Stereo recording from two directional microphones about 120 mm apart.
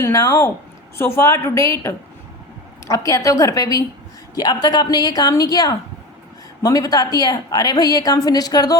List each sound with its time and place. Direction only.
0.0 s a woman's voice: 25° left (ahead or behind)